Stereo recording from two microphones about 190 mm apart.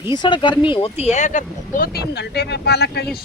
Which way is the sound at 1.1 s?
40° left (ahead or behind).